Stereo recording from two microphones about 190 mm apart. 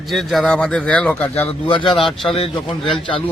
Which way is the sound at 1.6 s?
25° left (ahead or behind).